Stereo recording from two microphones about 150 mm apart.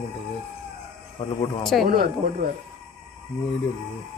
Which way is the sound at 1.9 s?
70° right (ahead or behind).